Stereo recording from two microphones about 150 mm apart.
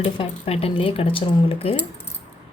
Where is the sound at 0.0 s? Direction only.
40° left (ahead or behind).